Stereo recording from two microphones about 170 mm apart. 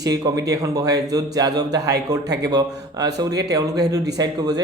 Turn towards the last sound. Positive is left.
turn(degrees=-25)  # may be behind; listen again after turning